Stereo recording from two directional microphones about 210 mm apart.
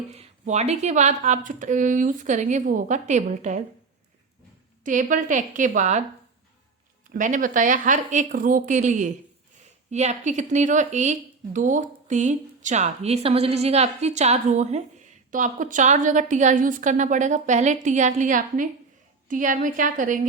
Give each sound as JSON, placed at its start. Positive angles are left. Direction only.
{"t": 0.1, "sound": "speech", "side_deg": -30}
{"t": 4.8, "sound": "speech", "side_deg": -40}
{"t": 7.1, "sound": "speech", "side_deg": -40}